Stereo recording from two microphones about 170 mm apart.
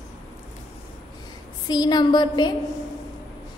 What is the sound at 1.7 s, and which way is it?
Speech, 25° left (ahead or behind).